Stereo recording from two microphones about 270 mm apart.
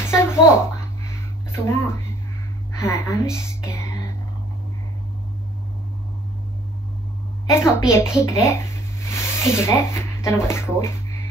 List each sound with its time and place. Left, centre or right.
0.0 s a sound: centre
1.5 s speech: centre
7.5 s speech: centre